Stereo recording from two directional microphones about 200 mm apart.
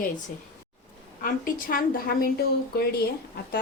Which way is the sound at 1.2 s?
45° left (ahead or behind).